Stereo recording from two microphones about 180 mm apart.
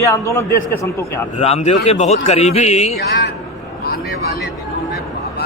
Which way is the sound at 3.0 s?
60° left (ahead or behind).